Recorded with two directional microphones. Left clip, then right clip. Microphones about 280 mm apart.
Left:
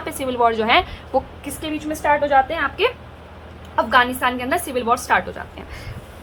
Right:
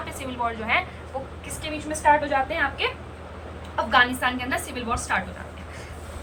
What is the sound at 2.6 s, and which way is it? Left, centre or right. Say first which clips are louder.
A woman's voice: left 5 dB; centre.